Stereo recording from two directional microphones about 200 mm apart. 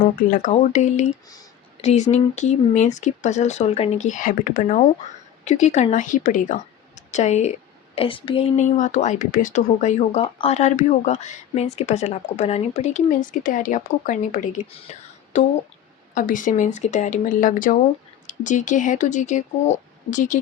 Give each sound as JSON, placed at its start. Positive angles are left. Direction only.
{"t": 0.3, "sound": "a woman's voice", "side_deg": 40}